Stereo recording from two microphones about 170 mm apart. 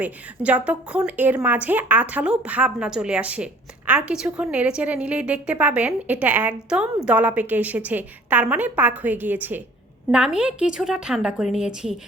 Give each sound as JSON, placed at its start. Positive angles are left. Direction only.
{"t": 0.0, "sound": "a woman's voice", "side_deg": -10}